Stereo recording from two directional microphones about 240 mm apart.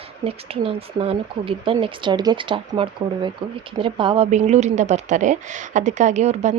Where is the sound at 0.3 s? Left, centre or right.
Right.